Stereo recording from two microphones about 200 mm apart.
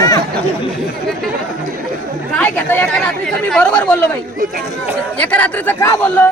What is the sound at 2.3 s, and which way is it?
Speech, 5° left (ahead or behind).